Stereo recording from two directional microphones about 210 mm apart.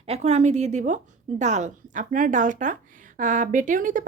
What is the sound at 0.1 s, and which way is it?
Speech, 30° right (ahead or behind).